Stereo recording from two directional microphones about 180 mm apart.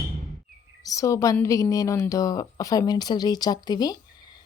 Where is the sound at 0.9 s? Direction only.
20° left (ahead or behind).